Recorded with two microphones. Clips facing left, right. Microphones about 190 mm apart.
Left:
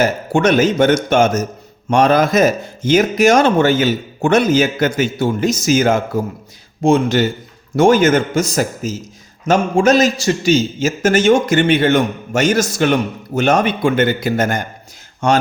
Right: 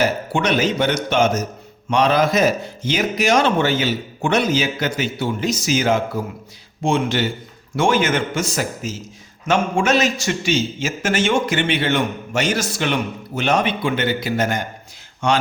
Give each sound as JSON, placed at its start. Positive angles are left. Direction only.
{"t": 0.0, "sound": "a man's voice", "side_deg": 45}